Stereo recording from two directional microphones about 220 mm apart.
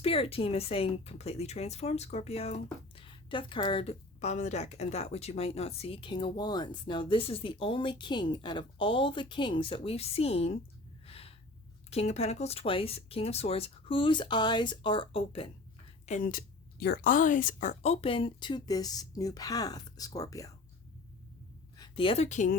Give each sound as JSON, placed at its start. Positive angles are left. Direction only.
{"t": 0.0, "sound": "speech", "side_deg": 25}
{"t": 11.0, "sound": "gasp", "side_deg": 25}
{"t": 11.9, "sound": "speech", "side_deg": 30}
{"t": 16.0, "sound": "speech", "side_deg": 35}
{"t": 21.8, "sound": "speech", "side_deg": 25}